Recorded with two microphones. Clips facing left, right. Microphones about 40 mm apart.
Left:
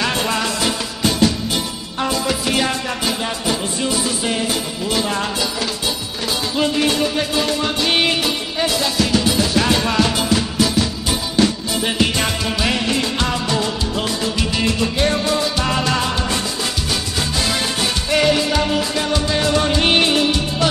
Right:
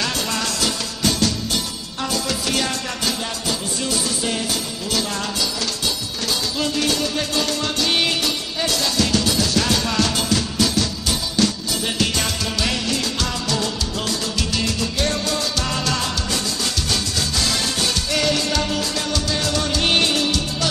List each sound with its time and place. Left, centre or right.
0.0 s music: left
6.6 s music: left
18.1 s music: left